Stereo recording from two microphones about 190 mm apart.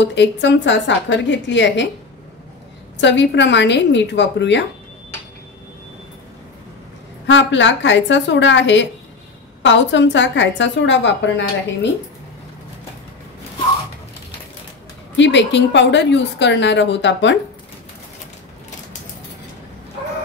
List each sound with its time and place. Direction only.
0.0 s a woman's voice: 65° left (ahead or behind)
3.0 s a woman's voice: 65° left (ahead or behind)
7.2 s a woman's voice: 75° left (ahead or behind)
15.1 s a woman's voice: 70° left (ahead or behind)